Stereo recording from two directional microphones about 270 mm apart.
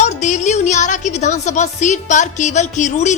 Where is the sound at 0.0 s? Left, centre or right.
Left.